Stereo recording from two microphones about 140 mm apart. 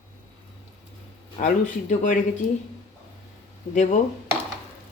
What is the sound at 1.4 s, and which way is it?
Speech, 65° left (ahead or behind).